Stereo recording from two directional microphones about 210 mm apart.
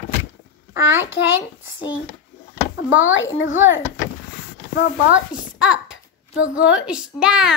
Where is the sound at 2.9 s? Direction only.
70° left (ahead or behind).